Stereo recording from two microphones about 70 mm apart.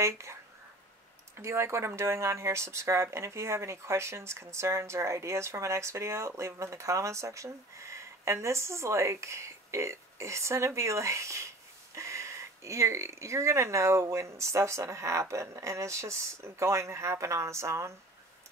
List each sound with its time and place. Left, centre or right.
0.0 s speech: right
1.4 s speech: right